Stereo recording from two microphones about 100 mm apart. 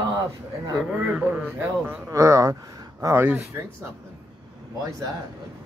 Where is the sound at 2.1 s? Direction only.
30° right (ahead or behind).